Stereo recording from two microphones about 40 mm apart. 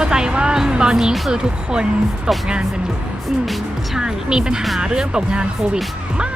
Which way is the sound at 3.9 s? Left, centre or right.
Centre.